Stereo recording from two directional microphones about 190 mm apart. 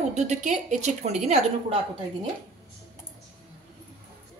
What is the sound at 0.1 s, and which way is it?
A woman's voice, 35° right (ahead or behind).